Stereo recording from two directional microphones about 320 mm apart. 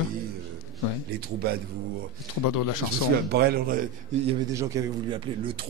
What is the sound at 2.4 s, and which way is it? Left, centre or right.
Speech, left.